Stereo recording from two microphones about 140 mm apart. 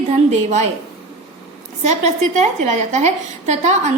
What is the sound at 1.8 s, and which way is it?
A woman's voice, 55° right (ahead or behind).